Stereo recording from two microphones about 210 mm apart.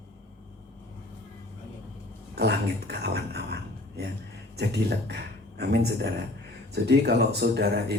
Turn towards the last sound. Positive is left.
turn(degrees=-50)  # may be behind; listen again after turning